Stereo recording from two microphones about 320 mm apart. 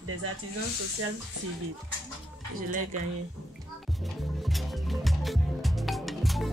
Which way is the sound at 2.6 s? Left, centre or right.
Right.